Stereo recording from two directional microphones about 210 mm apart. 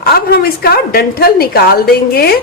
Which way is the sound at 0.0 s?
45° left (ahead or behind).